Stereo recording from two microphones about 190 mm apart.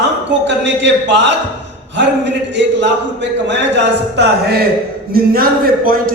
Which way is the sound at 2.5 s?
70° right (ahead or behind).